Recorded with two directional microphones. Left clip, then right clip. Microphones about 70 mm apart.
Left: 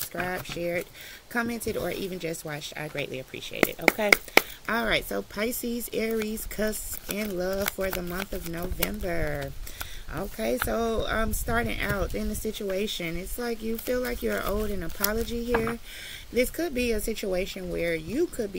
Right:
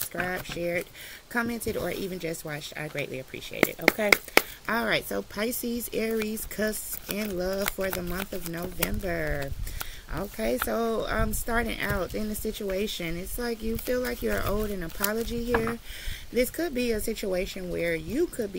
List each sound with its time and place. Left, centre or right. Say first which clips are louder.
0.1 s speech: even; right